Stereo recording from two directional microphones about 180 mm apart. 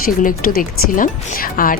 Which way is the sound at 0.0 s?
50° left (ahead or behind).